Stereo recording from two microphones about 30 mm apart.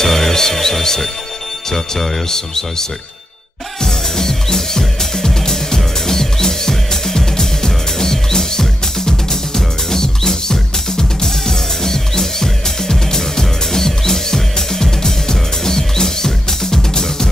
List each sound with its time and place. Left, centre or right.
0.0 s music: centre
1.7 s speech: centre
3.8 s music: centre